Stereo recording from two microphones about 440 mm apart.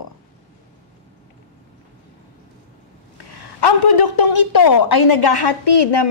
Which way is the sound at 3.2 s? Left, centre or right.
Left.